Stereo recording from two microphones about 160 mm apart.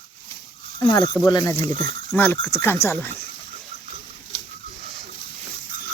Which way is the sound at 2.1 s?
15° left (ahead or behind).